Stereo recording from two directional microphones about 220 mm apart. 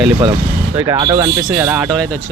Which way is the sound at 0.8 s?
15° right (ahead or behind).